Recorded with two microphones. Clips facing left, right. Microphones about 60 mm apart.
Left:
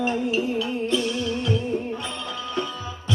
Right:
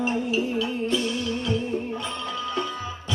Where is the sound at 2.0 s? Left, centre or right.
Right.